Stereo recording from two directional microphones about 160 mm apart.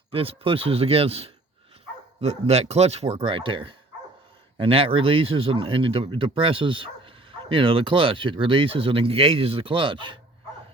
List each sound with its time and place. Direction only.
0.1 s speech: 35° right (ahead or behind)